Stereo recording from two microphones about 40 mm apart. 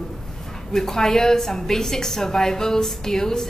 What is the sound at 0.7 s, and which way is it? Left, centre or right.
A woman's voice, centre.